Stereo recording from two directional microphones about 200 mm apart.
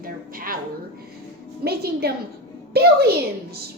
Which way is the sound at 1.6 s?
50° right (ahead or behind).